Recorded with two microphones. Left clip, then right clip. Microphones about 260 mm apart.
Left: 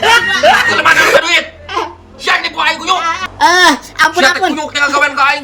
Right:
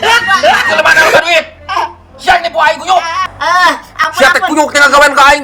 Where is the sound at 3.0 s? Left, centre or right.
Centre.